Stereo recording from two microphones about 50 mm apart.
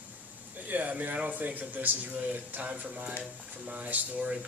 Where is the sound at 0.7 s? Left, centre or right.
Right.